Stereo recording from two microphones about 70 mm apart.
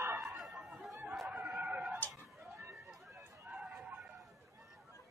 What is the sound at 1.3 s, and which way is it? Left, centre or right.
Vehicle, centre.